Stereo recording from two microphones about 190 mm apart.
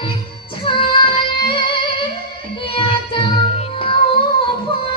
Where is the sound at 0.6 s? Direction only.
30° left (ahead or behind).